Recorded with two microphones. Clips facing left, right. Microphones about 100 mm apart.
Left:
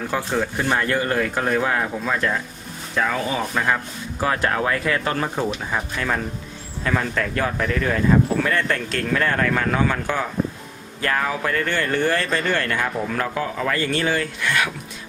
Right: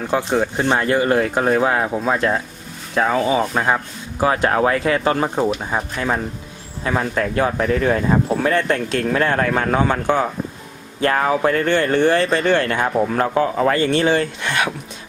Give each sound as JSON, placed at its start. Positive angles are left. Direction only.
{"t": 0.1, "sound": "speech", "side_deg": -20}